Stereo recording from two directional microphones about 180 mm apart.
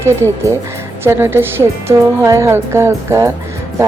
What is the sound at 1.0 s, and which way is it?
Speech, 15° right (ahead or behind).